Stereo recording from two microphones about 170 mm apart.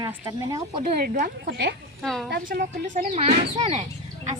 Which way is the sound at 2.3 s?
60° right (ahead or behind).